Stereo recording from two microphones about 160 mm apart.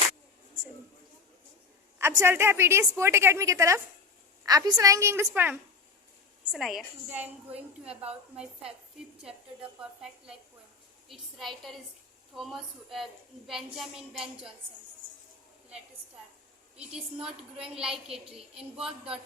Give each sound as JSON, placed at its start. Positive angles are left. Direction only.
{"t": 2.0, "sound": "a woman's voice", "side_deg": -15}
{"t": 11.1, "sound": "a woman's voice", "side_deg": 0}
{"t": 17.2, "sound": "a woman's voice", "side_deg": -5}